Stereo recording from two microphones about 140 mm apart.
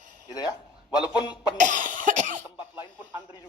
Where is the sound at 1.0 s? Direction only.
30° left (ahead or behind).